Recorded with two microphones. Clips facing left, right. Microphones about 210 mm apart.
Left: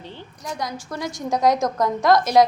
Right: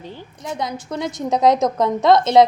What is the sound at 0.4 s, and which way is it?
A woman's voice, 25° right (ahead or behind).